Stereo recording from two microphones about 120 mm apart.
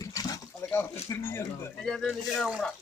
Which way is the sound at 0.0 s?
30° left (ahead or behind).